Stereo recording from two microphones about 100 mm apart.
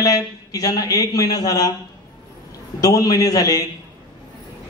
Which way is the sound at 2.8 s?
35° left (ahead or behind).